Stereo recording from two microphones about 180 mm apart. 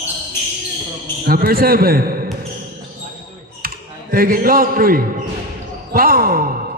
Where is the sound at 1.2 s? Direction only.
55° right (ahead or behind).